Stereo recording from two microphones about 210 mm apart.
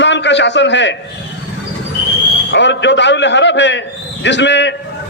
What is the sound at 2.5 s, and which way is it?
A man's voice, 55° left (ahead or behind).